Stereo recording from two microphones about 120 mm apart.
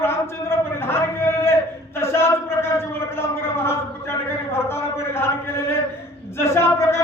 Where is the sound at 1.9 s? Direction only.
20° left (ahead or behind).